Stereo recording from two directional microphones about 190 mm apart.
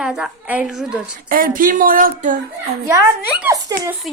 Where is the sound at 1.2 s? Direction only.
45° right (ahead or behind).